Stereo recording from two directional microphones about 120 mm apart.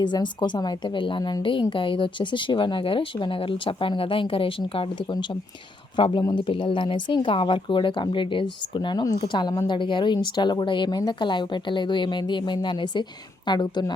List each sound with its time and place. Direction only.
0.0 s a woman's voice: 40° left (ahead or behind)
6.0 s a woman's voice: 45° left (ahead or behind)